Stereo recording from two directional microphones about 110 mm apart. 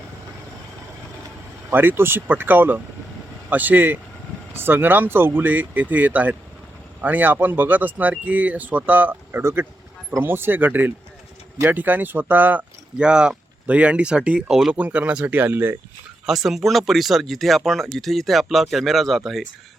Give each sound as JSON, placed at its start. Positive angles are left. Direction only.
{"t": 1.7, "sound": "speech", "side_deg": -20}
{"t": 16.2, "sound": "speech", "side_deg": -5}